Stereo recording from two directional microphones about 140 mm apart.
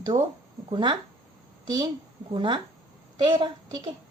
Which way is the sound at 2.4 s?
35° right (ahead or behind).